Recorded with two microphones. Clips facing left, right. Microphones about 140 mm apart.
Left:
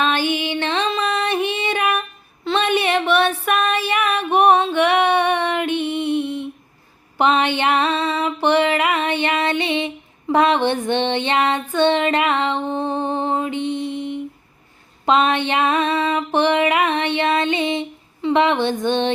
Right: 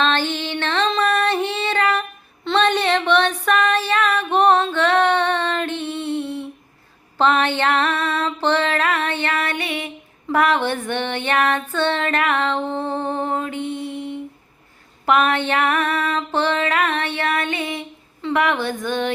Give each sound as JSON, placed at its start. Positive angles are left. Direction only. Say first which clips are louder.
{"t": 0.0, "sound": "music", "louder": "left 1 dB", "side_deg": 10}